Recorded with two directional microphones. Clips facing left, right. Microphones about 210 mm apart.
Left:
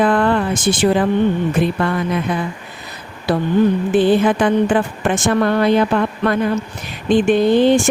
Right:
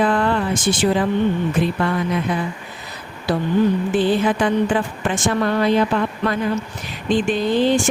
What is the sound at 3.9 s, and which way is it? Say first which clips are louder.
A woman's voice: left 4 dB; 55° left (ahead or behind).